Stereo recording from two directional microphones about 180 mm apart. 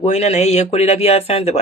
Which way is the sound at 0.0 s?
40° left (ahead or behind).